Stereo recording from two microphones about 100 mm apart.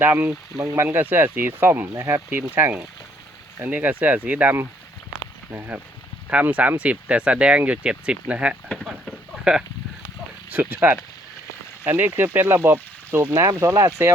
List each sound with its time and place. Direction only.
0.0 s speech: 20° right (ahead or behind)
8.7 s a sound: centre (ahead or behind)
10.5 s speech: 15° right (ahead or behind)